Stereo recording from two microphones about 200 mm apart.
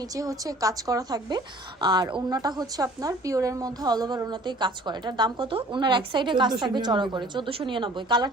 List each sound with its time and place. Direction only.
0.0 s a woman's voice: 15° right (ahead or behind)